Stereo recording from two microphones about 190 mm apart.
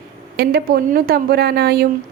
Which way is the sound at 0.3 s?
55° right (ahead or behind).